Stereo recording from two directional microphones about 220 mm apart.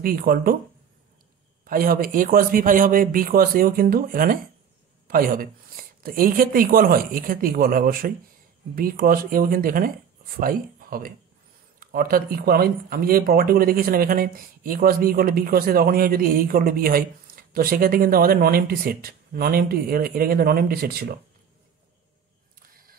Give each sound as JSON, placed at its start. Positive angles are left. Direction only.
{"t": 0.0, "sound": "speech", "side_deg": -40}
{"t": 1.6, "sound": "speech", "side_deg": -40}